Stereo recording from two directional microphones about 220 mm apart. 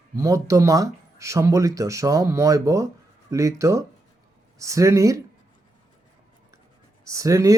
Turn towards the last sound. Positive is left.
turn(degrees=-15)  # may be behind; listen again after turning